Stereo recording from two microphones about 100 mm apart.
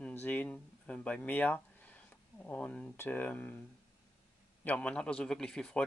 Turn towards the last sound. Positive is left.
turn(degrees=10)  # may be behind; listen again after turning